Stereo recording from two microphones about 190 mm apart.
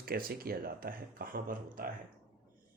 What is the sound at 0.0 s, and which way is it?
Speech, 50° right (ahead or behind).